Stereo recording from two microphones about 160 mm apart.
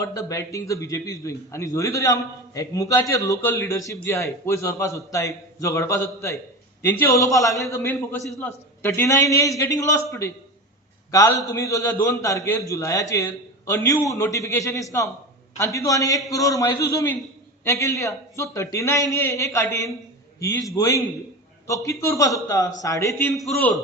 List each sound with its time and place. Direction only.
0.0 s a man's voice: 20° left (ahead or behind)
11.4 s a man's voice: 20° left (ahead or behind)